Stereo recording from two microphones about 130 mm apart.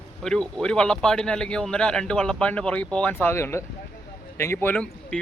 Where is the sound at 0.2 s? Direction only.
5° left (ahead or behind).